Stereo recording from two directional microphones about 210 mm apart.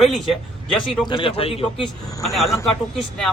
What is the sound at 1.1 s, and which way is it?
Speech, 25° left (ahead or behind).